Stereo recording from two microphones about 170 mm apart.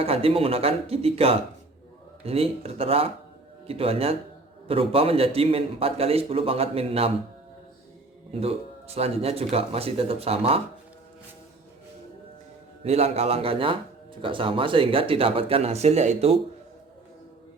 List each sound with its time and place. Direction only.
0.0 s a man's voice: 35° right (ahead or behind)
8.3 s a man's voice: 35° right (ahead or behind)
12.8 s a man's voice: 40° right (ahead or behind)